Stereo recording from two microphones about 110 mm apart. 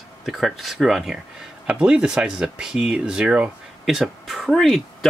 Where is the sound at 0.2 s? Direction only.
Centre (ahead or behind).